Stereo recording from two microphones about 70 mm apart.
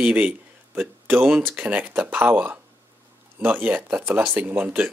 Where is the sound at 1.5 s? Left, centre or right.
Right.